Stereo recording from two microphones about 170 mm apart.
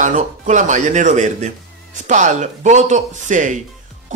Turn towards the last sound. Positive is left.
turn(degrees=-45)  # may be behind; listen again after turning